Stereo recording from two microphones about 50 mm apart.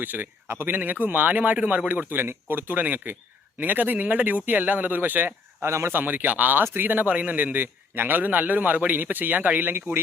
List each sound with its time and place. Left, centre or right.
0.0 s a man's voice: right
2.0 s a man's voice: right
5.6 s speech: right
5.9 s a man's voice: right